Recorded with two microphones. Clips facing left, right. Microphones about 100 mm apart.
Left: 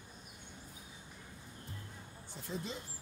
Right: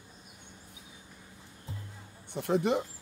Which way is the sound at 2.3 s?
70° right (ahead or behind).